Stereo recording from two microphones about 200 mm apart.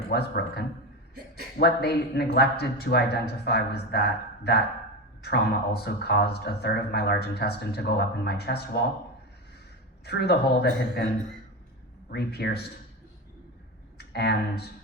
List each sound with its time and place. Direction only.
0.1 s speech: 55° left (ahead or behind)
10.1 s speech: 55° left (ahead or behind)
12.1 s speech: 55° left (ahead or behind)
14.0 s speech: 55° left (ahead or behind)